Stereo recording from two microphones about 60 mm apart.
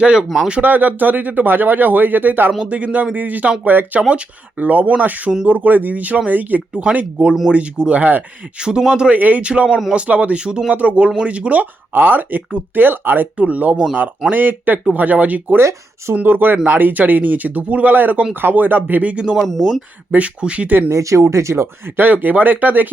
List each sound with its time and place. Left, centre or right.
0.0 s a man's voice: centre
0.6 s speech: right
8.5 s a man's voice: centre
9.1 s speech: right
9.5 s a man's voice: centre; by 13.2 s right
13.3 s speech: right
15.5 s speech: right
16.1 s speech: right
20.9 s speech: right